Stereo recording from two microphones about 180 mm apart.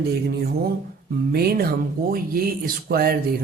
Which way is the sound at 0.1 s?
60° right (ahead or behind).